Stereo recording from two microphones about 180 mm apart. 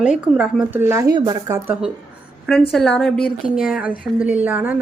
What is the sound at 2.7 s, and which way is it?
A woman's voice, 5° left (ahead or behind).